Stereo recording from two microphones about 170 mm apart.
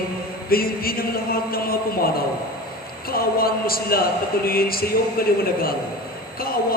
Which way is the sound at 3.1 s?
60° left (ahead or behind).